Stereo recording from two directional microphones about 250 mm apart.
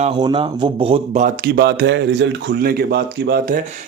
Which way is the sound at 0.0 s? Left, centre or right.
Centre.